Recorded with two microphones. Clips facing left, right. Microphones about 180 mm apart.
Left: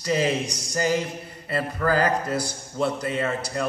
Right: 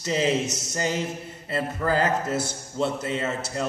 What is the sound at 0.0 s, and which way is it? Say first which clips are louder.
A man's voice: even; 25° right (ahead or behind).